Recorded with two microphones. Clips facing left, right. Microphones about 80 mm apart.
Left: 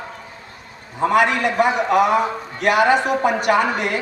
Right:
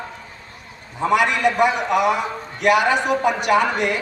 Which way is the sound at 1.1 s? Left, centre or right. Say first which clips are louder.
Even; left.